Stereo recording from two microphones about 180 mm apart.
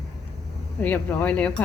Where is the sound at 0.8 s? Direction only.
10° left (ahead or behind).